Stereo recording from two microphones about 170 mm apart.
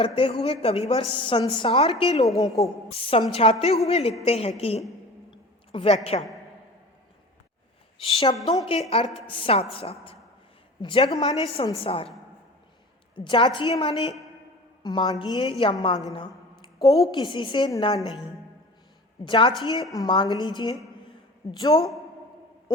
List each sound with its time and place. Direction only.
0.0 s a woman's voice: 30° left (ahead or behind)
5.3 s a sound: 30° left (ahead or behind)
8.0 s a woman's voice: 35° left (ahead or behind)
13.1 s a woman's voice: 30° left (ahead or behind)
14.8 s a woman's voice: 25° left (ahead or behind)
16.1 s a sound: 25° left (ahead or behind)
17.1 s a woman's voice: 25° left (ahead or behind)
19.2 s a woman's voice: 30° left (ahead or behind)
21.7 s a woman's voice: 40° left (ahead or behind)